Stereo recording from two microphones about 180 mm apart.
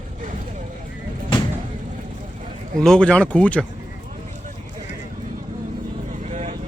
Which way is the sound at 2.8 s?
5° left (ahead or behind).